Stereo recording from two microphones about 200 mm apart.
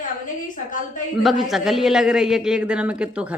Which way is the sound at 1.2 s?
Centre (ahead or behind).